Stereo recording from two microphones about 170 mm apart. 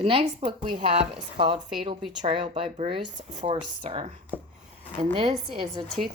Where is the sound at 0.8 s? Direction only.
30° right (ahead or behind).